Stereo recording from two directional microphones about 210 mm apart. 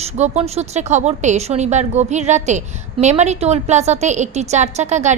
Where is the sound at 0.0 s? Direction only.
30° right (ahead or behind).